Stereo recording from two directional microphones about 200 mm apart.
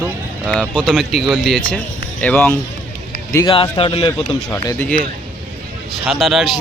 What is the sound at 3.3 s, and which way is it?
Speech, 25° left (ahead or behind).